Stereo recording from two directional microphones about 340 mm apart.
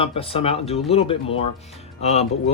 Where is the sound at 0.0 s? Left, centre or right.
Centre.